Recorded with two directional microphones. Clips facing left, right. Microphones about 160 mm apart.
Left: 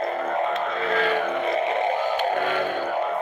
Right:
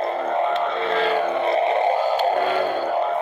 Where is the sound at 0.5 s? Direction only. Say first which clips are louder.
Right 3 dB; 30° right (ahead or behind).